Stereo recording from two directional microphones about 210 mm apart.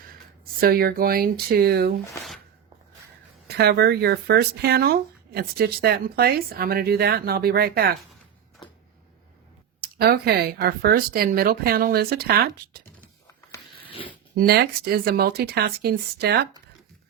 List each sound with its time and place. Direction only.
0.6 s speech: 45° right (ahead or behind)
3.4 s speech: 50° right (ahead or behind)
9.8 s speech: 45° right (ahead or behind)
14.3 s speech: 50° right (ahead or behind)